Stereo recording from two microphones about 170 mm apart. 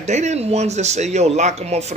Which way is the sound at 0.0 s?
40° right (ahead or behind).